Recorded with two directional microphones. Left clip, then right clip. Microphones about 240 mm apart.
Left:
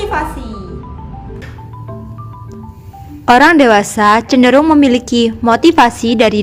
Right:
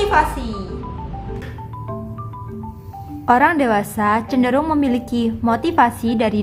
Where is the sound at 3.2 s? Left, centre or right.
Left.